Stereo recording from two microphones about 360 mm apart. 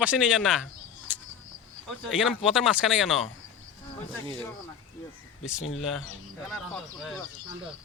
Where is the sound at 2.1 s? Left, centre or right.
Centre.